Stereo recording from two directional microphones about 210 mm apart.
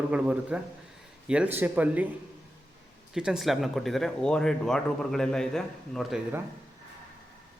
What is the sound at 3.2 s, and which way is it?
Speech, centre (ahead or behind).